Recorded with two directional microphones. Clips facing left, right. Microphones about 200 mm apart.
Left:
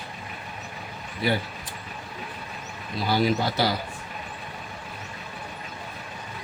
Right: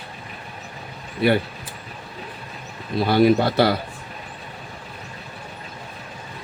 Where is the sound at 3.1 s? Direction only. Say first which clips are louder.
Right 7 dB; 60° right (ahead or behind).